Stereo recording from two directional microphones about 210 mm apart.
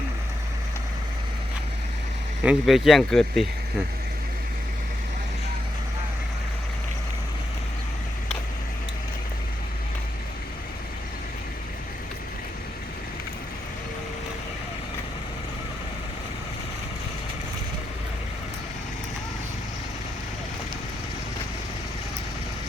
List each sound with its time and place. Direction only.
2.4 s speech: 5° right (ahead or behind)